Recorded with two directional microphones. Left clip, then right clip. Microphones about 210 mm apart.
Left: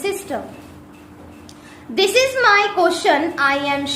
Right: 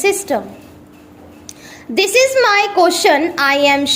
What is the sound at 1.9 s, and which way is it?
A woman's voice, 35° right (ahead or behind).